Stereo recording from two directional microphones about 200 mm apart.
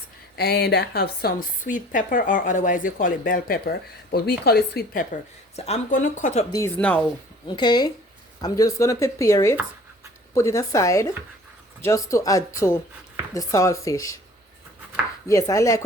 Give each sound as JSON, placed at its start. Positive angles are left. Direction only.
{"t": 0.3, "sound": "a woman's voice", "side_deg": 55}
{"t": 6.5, "sound": "speech", "side_deg": 10}
{"t": 7.4, "sound": "speech", "side_deg": 20}
{"t": 15.3, "sound": "speech", "side_deg": 15}